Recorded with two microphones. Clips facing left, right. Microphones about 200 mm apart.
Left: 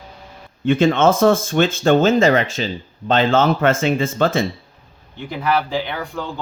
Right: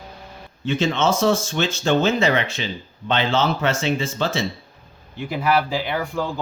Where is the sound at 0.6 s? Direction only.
55° left (ahead or behind).